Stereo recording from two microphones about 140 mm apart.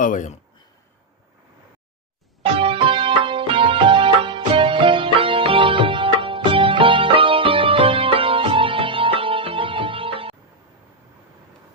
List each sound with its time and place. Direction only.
0.0 s speech: 65° left (ahead or behind)
2.4 s music: 40° right (ahead or behind)